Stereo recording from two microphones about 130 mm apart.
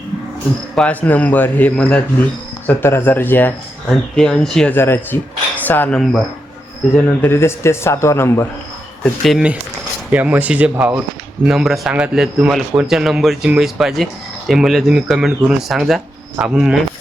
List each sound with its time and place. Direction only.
0.8 s speech: 10° left (ahead or behind)
4.7 s speech: 20° left (ahead or behind)
9.2 s speech: centre (ahead or behind)
10.1 s speech: 10° right (ahead or behind)